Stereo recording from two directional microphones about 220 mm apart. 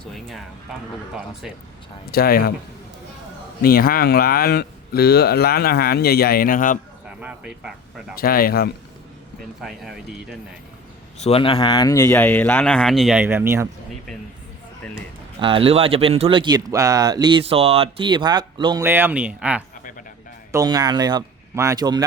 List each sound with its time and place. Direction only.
0.0 s music: centre (ahead or behind)
1.1 s speech: centre (ahead or behind)
2.1 s a man's voice: 45° left (ahead or behind)
3.6 s a man's voice: 40° left (ahead or behind)
7.1 s speech: 5° right (ahead or behind)
8.2 s speech: 40° left (ahead or behind)
9.6 s speech: centre (ahead or behind)
11.2 s speech: 25° left (ahead or behind); by 13.7 s 10° right (ahead or behind)
15.4 s speech: 25° right (ahead or behind)
18.8 s speech: 10° right (ahead or behind)
20.5 s speech: 15° right (ahead or behind)